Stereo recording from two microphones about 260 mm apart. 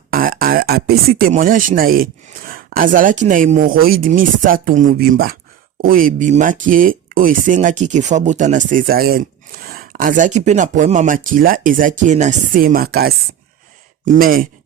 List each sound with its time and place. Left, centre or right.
0.1 s speech: right